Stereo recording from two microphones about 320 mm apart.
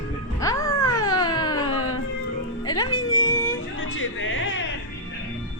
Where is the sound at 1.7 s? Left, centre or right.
Left.